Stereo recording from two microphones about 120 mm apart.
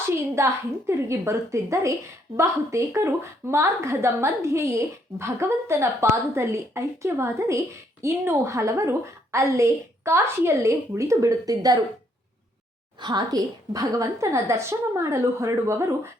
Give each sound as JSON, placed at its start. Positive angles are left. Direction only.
{"t": 0.3, "sound": "a woman's voice", "side_deg": -25}
{"t": 13.0, "sound": "a woman's voice", "side_deg": -35}